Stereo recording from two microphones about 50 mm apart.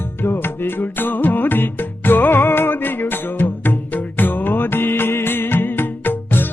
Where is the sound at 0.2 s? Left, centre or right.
Left.